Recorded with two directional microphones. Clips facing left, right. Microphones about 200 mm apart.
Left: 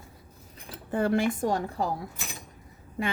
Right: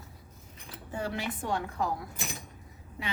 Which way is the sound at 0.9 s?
55° left (ahead or behind).